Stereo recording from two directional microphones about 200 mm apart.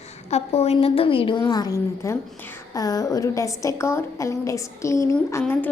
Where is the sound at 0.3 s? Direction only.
30° left (ahead or behind).